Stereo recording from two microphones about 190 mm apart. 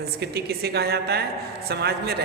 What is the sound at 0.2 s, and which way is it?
A woman's voice, 55° right (ahead or behind).